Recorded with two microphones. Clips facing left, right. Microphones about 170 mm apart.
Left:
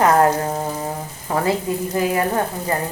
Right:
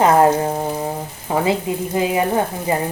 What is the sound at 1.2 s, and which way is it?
Frying, 20° right (ahead or behind).